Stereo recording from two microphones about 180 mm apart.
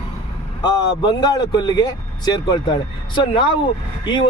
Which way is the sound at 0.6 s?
25° left (ahead or behind).